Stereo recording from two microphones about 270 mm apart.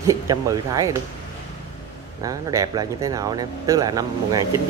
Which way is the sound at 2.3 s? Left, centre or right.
Centre.